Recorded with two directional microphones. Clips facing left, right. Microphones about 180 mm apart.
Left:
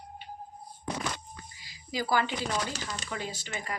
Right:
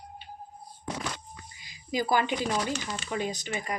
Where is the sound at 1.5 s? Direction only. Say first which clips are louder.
Right 4 dB; 20° right (ahead or behind).